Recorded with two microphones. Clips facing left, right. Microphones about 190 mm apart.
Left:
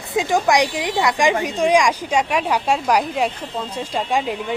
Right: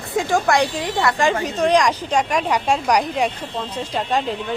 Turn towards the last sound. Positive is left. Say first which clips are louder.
# even
turn(degrees=10)  # may be behind; listen again after turning